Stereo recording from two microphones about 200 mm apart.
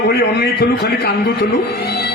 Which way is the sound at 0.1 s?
55° left (ahead or behind).